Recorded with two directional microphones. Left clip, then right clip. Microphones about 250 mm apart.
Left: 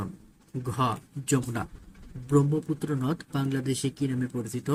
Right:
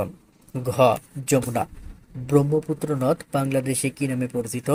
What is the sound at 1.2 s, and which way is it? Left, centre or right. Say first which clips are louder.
Speech: right 7 dB; centre.